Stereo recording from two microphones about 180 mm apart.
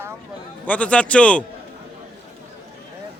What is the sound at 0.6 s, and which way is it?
Speech, 10° left (ahead or behind).